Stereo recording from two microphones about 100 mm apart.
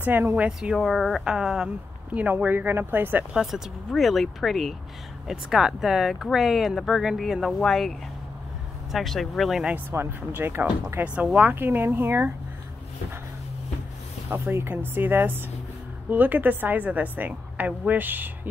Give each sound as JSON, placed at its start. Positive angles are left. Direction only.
{"t": 0.0, "sound": "speech", "side_deg": -20}
{"t": 0.5, "sound": "speech", "side_deg": -5}
{"t": 3.3, "sound": "speech", "side_deg": -5}
{"t": 8.9, "sound": "speech", "side_deg": 0}
{"t": 9.7, "sound": "speech", "side_deg": -20}
{"t": 14.3, "sound": "a woman's voice", "side_deg": -25}